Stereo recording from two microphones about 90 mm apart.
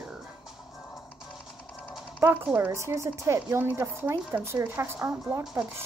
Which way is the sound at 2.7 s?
35° right (ahead or behind).